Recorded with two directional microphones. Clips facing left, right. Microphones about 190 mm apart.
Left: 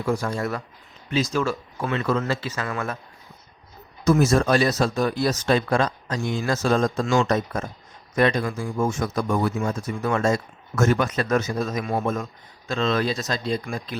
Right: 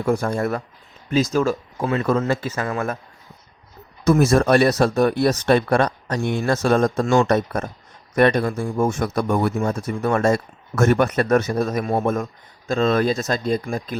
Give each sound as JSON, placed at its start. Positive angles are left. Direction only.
{"t": 0.0, "sound": "speech", "side_deg": -55}
{"t": 4.0, "sound": "speech", "side_deg": -55}
{"t": 8.5, "sound": "speech", "side_deg": -50}